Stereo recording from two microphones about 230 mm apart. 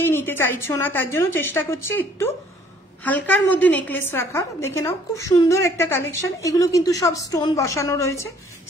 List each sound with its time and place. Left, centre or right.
0.0 s a woman's voice: centre